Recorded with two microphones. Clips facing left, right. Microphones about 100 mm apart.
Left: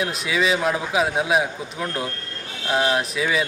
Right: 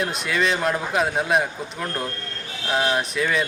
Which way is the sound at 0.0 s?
Centre (ahead or behind).